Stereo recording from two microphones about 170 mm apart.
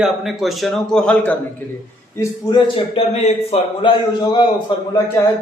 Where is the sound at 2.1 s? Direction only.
30° left (ahead or behind).